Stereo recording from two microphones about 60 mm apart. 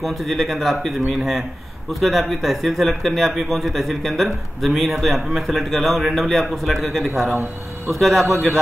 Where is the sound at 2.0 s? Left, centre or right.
Centre.